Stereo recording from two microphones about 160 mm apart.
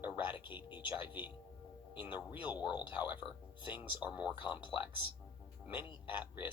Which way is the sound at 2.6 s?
30° left (ahead or behind).